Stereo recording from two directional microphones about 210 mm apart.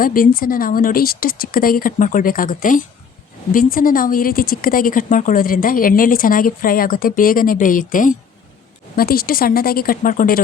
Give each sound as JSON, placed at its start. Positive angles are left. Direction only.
{"t": 0.0, "sound": "a woman's voice", "side_deg": 40}